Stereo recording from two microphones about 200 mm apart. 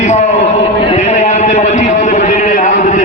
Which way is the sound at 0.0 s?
35° left (ahead or behind).